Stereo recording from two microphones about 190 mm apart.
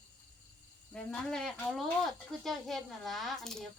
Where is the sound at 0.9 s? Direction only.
5° left (ahead or behind).